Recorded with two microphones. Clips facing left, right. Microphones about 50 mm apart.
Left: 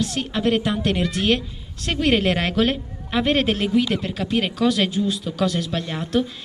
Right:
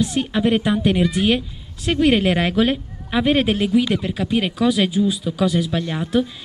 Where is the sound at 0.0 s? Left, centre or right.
Centre.